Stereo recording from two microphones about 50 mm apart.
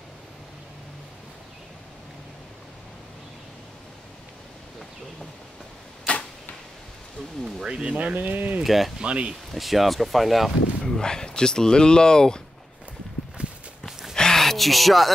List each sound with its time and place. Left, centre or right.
7.6 s speech: centre
7.9 s speech: right
8.6 s speech: centre
9.0 s speech: right
9.3 s speech: centre
10.8 s speech: centre
14.1 s gasp: centre